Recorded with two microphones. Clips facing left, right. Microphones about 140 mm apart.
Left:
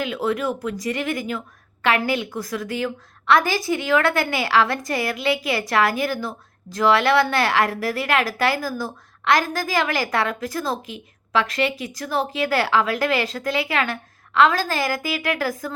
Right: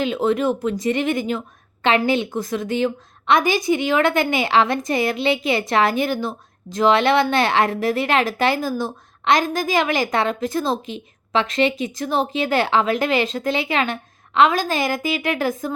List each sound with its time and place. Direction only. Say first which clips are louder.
0.0 s a woman's voice: right 4 dB; 25° right (ahead or behind)